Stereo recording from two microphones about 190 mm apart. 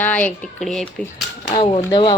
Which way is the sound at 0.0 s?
10° left (ahead or behind).